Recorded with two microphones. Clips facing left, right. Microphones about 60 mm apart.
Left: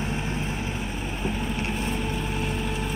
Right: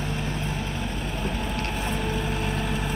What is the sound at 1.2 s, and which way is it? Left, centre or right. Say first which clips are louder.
Boat: left 1 dB; centre.